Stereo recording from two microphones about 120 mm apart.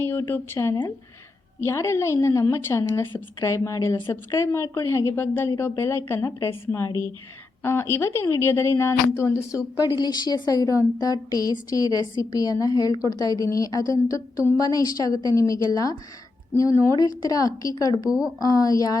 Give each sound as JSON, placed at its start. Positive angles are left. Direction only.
{"t": 0.0, "sound": "a woman's voice", "side_deg": 20}
{"t": 9.8, "sound": "a woman's voice", "side_deg": 35}